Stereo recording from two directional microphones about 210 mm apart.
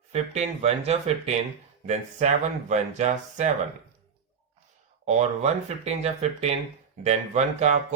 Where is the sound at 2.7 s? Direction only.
35° right (ahead or behind).